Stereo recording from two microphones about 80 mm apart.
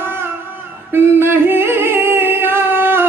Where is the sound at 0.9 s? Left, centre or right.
Right.